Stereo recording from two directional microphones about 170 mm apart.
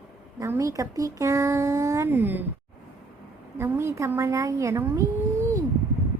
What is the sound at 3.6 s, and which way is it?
A woman's voice, 15° right (ahead or behind).